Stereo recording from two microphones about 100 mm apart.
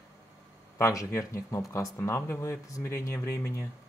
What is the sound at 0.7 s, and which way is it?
Speech, 30° left (ahead or behind).